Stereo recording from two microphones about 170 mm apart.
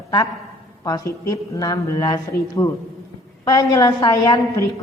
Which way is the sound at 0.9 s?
20° left (ahead or behind).